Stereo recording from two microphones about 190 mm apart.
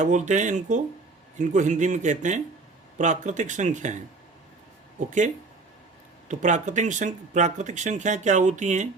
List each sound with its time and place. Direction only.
0.0 s speech: 40° right (ahead or behind)
4.9 s speech: 40° right (ahead or behind)